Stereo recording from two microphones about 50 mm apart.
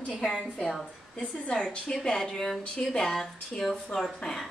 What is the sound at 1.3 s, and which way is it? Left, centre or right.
Speech, centre.